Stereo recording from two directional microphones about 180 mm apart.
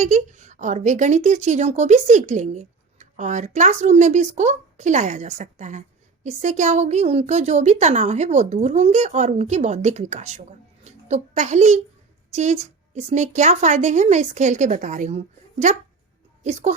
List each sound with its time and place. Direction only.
0.0 s a woman's voice: 45° right (ahead or behind)